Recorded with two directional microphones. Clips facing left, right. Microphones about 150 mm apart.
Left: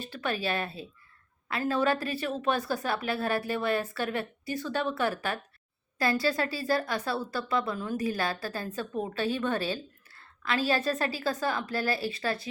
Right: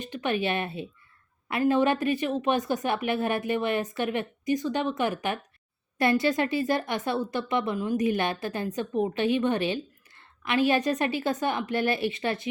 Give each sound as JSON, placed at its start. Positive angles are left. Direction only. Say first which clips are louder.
{"t": 0.0, "sound": "a woman's voice", "louder": "right 4 dB", "side_deg": -20}